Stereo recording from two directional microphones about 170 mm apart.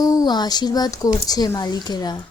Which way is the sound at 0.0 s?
20° left (ahead or behind).